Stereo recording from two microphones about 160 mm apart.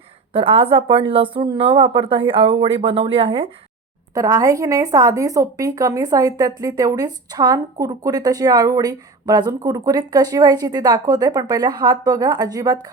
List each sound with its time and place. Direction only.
0.3 s speech: 35° right (ahead or behind)
4.1 s a woman's voice: 20° right (ahead or behind)